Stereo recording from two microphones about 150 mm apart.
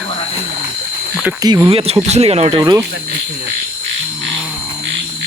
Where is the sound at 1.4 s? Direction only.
25° right (ahead or behind).